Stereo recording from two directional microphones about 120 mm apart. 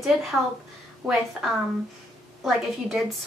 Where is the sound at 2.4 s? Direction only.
Centre (ahead or behind).